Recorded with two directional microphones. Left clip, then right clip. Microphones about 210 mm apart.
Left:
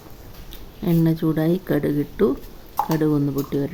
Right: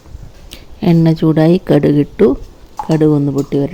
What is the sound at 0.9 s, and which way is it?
Speech, 25° right (ahead or behind).